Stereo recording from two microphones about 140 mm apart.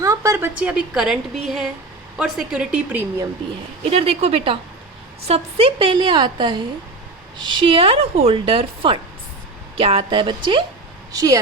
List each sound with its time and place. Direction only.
0.0 s a woman's voice: 20° right (ahead or behind)
3.8 s a woman's voice: 45° right (ahead or behind); by 11.3 s 25° right (ahead or behind)